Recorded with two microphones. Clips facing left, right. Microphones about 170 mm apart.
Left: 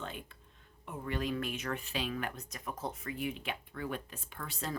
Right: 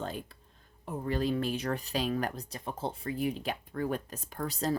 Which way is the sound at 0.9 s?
35° right (ahead or behind).